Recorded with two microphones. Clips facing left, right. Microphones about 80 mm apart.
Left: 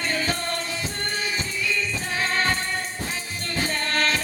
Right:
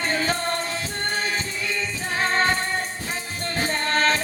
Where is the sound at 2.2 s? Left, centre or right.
Right.